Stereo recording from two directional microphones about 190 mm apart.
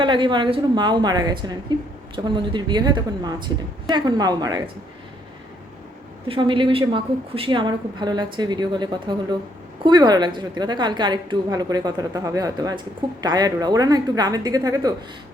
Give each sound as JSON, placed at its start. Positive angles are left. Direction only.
{"t": 0.0, "sound": "a woman's voice", "side_deg": -25}
{"t": 6.2, "sound": "a woman's voice", "side_deg": -30}